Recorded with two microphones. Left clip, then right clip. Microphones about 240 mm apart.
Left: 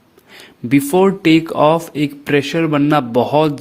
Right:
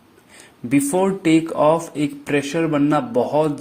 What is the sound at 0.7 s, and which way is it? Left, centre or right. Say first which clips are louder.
A man's voice: left 5 dB; left.